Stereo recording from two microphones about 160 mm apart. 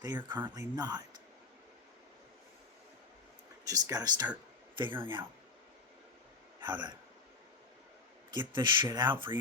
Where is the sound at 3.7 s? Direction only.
25° right (ahead or behind).